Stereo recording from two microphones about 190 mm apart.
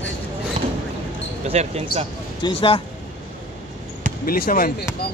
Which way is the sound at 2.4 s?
30° left (ahead or behind).